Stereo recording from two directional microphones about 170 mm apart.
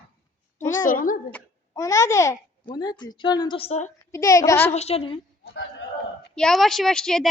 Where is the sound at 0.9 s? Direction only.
55° left (ahead or behind).